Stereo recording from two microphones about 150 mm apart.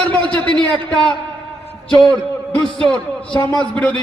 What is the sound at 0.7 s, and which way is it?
A man's voice, 5° left (ahead or behind).